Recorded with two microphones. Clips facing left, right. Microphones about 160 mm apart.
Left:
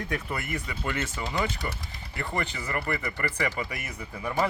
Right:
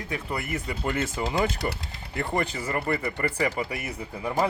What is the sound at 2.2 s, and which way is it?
Speech, 25° right (ahead or behind).